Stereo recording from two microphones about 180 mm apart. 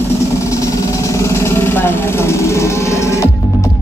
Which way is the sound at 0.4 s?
15° left (ahead or behind).